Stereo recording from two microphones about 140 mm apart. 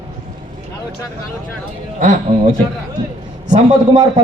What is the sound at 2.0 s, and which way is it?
Speech, 65° right (ahead or behind).